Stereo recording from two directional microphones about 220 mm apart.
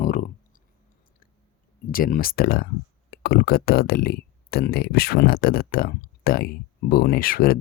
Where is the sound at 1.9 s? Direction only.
40° left (ahead or behind).